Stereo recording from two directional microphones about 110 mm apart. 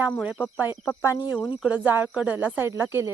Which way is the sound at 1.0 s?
35° left (ahead or behind).